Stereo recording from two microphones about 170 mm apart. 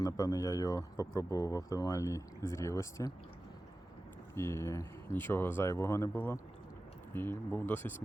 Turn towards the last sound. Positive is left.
turn(degrees=10)  # may be behind; listen again after turning